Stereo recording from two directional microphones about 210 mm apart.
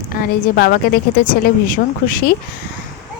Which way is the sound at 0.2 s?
45° left (ahead or behind).